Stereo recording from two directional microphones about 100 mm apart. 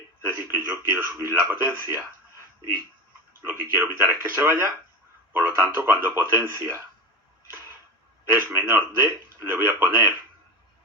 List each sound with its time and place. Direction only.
0.2 s a man's voice: 20° right (ahead or behind)
3.4 s speech: 25° right (ahead or behind)
8.3 s speech: 20° right (ahead or behind)